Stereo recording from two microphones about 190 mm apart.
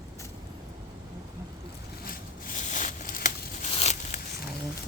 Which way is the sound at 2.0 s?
45° left (ahead or behind).